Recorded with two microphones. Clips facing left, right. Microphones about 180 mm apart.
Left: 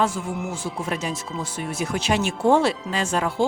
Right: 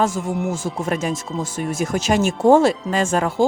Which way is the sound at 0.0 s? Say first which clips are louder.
Right 4 dB; 45° right (ahead or behind).